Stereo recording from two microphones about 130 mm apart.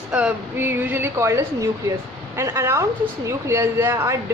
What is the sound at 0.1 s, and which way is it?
A woman's voice, 10° right (ahead or behind).